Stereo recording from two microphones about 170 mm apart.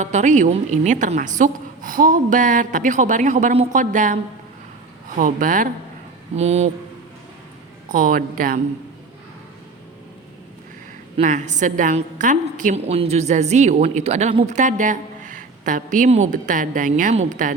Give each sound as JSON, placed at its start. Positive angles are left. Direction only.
{"t": 0.0, "sound": "a woman's voice", "side_deg": -45}
{"t": 6.3, "sound": "speech", "side_deg": -40}
{"t": 7.9, "sound": "a woman's voice", "side_deg": -50}
{"t": 11.2, "sound": "a woman's voice", "side_deg": -45}